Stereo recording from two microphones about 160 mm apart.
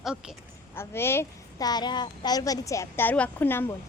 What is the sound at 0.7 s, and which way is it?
A child's voice, 15° left (ahead or behind).